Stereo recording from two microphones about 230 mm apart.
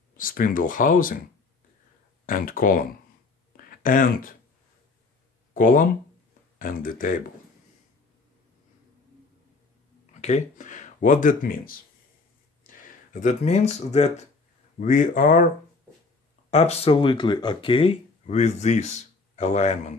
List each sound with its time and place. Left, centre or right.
0.2 s speech: left
2.2 s speech: left
5.5 s speech: left
10.2 s speech: left